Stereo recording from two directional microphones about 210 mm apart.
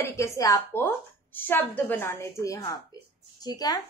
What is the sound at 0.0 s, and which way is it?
A woman's voice, 15° left (ahead or behind).